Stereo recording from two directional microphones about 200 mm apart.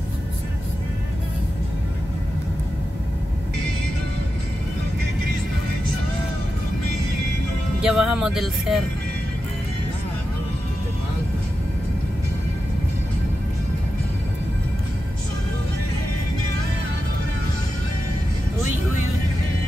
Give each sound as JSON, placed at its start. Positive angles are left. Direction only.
{"t": 7.8, "sound": "speech", "side_deg": -5}